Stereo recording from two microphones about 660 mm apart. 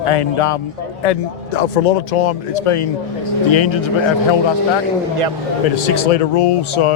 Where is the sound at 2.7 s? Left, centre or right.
Left.